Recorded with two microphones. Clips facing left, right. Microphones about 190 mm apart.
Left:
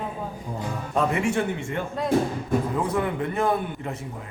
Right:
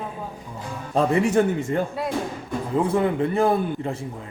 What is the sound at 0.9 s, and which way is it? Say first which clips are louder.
Speech: right 5 dB; 35° right (ahead or behind).